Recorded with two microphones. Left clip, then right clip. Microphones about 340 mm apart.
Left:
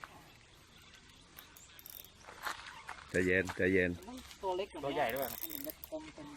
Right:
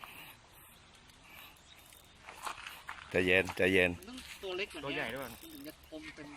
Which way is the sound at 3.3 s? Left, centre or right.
Centre.